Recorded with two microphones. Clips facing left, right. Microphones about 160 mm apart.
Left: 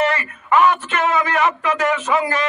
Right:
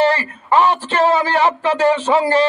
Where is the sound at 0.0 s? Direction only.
30° right (ahead or behind).